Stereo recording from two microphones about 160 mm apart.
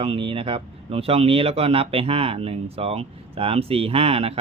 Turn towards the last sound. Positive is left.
turn(degrees=-40)  # may be behind; listen again after turning